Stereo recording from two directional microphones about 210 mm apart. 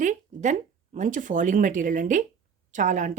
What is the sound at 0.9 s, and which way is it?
Speech, 35° right (ahead or behind).